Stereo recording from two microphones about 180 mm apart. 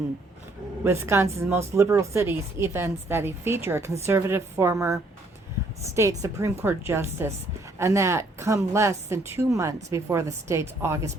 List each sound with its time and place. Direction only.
0.9 s speech: 15° right (ahead or behind)
6.0 s speech: 15° right (ahead or behind)